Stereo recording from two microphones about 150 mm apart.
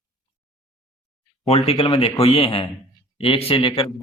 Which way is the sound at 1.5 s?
40° left (ahead or behind).